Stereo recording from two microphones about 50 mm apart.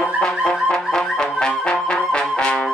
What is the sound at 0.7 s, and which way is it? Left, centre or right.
Music, centre.